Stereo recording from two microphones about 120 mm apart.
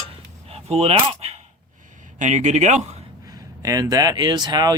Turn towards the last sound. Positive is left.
turn(degrees=-35)  # may be behind; listen again after turning